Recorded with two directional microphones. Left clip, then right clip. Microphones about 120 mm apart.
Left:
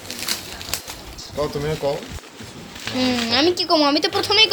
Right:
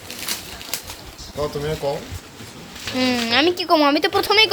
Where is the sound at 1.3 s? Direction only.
15° left (ahead or behind).